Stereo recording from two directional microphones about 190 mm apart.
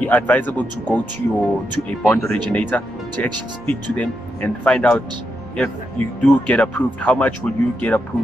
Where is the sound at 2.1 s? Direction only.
5° left (ahead or behind).